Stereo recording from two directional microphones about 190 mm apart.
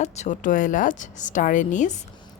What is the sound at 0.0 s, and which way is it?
Speech, 35° left (ahead or behind).